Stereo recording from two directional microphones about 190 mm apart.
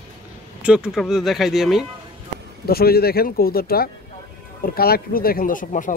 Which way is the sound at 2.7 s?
55° left (ahead or behind).